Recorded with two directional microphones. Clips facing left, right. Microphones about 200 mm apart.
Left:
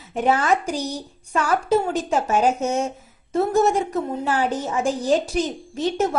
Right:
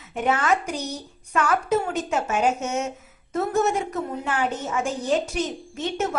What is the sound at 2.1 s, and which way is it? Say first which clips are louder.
A woman's voice: left 3 dB; 35° left (ahead or behind).